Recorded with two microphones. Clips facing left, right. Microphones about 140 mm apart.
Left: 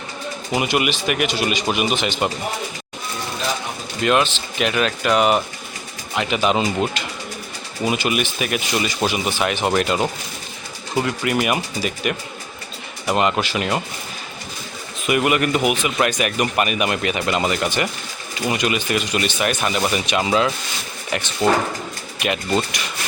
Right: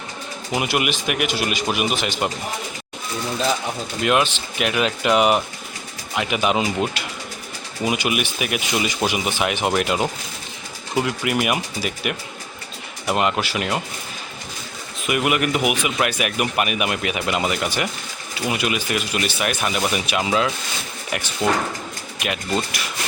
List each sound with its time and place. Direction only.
0.5 s speech: centre (ahead or behind)
4.0 s speech: 10° right (ahead or behind)
15.0 s speech: 5° right (ahead or behind)